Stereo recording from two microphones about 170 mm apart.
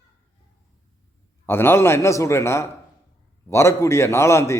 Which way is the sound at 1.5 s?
15° left (ahead or behind).